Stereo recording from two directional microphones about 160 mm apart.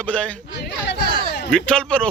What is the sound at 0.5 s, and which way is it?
Chatter, 90° left.